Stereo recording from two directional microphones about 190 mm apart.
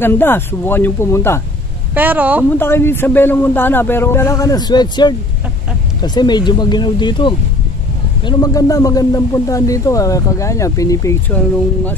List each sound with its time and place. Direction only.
0.0 s speech: 10° left (ahead or behind)
2.0 s speech: 10° right (ahead or behind)
2.5 s speech: 10° left (ahead or behind)